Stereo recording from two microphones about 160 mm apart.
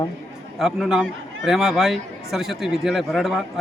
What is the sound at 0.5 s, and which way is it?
A man's voice, centre (ahead or behind).